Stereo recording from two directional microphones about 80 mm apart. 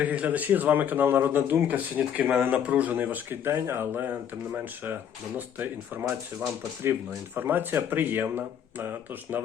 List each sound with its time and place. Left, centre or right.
0.0 s a man's voice: centre
7.3 s a man's voice: right